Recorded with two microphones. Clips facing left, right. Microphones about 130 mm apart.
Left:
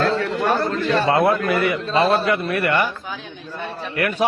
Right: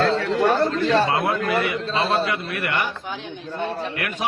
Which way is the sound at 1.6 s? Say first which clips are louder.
Left 5 dB; 45° left (ahead or behind).